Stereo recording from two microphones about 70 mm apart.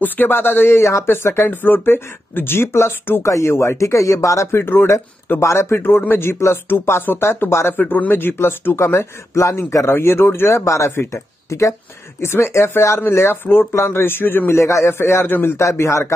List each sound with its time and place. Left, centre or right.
0.0 s speech: left
0.7 s speech: left
5.8 s speech: left
7.8 s speech: left
15.2 s speech: left
15.5 s speech: left